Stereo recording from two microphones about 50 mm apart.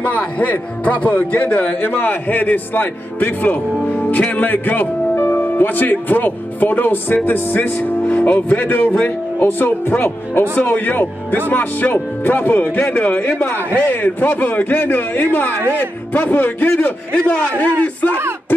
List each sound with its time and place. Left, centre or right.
0.0 s speech: left